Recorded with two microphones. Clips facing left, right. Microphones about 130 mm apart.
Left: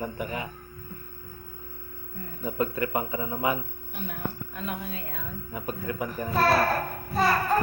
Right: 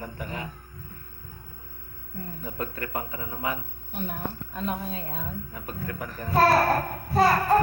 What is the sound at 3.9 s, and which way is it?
A woman's voice, 40° right (ahead or behind).